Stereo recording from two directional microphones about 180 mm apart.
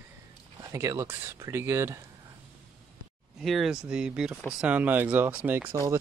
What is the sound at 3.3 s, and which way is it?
Speech, centre (ahead or behind).